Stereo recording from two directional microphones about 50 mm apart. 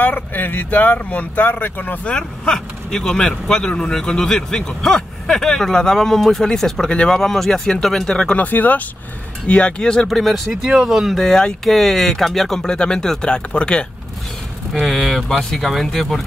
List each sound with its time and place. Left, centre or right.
0.0 s speech: left
2.0 s speech: centre
8.4 s speech: left
9.5 s speech: left
10.0 s speech: centre
10.5 s speech: centre
11.2 s speech: centre
14.7 s speech: centre